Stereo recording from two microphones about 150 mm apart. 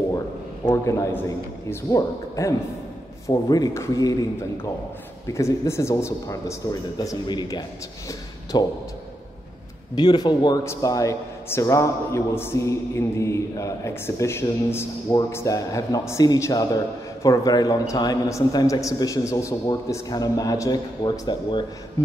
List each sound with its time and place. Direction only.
0.7 s a man's voice: 20° left (ahead or behind)
9.9 s a man's voice: 30° left (ahead or behind)